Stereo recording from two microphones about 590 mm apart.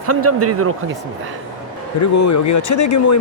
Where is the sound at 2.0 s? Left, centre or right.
Left.